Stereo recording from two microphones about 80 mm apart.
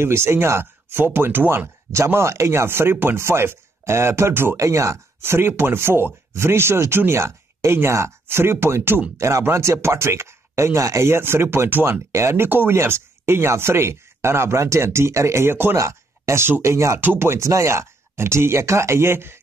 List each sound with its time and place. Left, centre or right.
0.0 s speech: right
1.9 s speech: right
4.6 s speech: right
17.0 s speech: right